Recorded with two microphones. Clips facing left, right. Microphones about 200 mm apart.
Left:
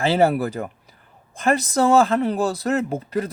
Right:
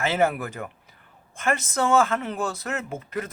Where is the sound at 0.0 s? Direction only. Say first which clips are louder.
Left 5 dB; 35° left (ahead or behind).